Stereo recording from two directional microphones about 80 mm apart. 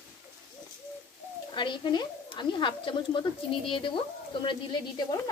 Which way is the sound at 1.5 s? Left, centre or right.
Left.